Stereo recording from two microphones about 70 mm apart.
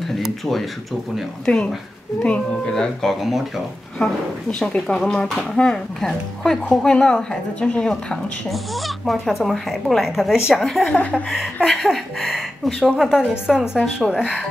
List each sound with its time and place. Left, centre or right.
0.2 s speech: centre
4.0 s speech: centre
7.9 s speech: centre
10.9 s speech: left
11.8 s speech: centre